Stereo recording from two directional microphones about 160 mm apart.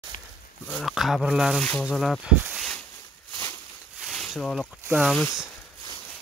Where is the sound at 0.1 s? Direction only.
55° left (ahead or behind).